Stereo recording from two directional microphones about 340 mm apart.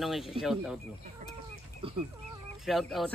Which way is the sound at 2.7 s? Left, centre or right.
Centre.